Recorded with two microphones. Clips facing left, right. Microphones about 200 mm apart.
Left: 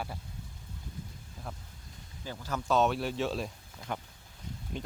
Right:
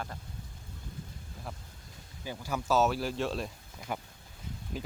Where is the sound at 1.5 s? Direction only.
Centre (ahead or behind).